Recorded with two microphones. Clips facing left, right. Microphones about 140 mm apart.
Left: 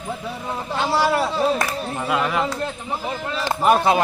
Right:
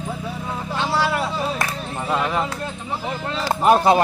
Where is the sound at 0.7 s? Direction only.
10° left (ahead or behind).